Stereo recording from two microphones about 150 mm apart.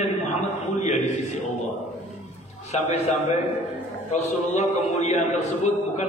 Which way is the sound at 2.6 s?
50° left (ahead or behind).